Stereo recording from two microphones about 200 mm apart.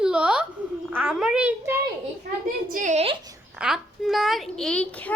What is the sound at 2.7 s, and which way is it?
Speech, 40° right (ahead or behind).